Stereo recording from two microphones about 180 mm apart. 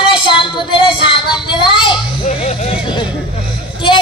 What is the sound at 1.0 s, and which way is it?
Child singing, 25° left (ahead or behind).